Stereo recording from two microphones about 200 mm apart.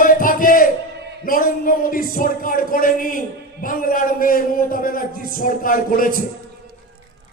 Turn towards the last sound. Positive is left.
turn(degrees=45)  # may be behind; listen again after turning